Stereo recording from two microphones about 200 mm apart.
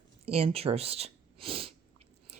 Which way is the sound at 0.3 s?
30° right (ahead or behind).